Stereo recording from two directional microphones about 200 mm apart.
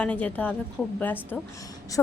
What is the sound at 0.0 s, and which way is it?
A woman's voice, 5° left (ahead or behind).